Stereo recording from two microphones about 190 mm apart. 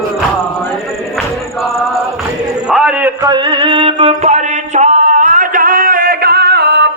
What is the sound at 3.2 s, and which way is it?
Male singing, 25° right (ahead or behind).